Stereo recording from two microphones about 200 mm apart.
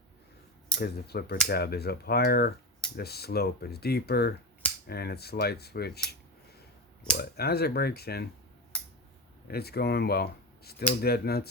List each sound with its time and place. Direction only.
0.8 s speech: 55° left (ahead or behind)
7.2 s speech: 50° left (ahead or behind)
9.5 s speech: 50° left (ahead or behind)